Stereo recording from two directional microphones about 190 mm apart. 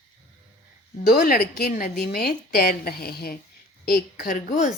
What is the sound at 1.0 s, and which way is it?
A woman's voice, 50° left (ahead or behind).